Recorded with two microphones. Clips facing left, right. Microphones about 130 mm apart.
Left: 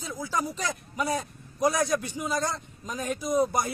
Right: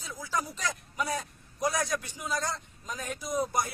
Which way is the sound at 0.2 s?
15° left (ahead or behind).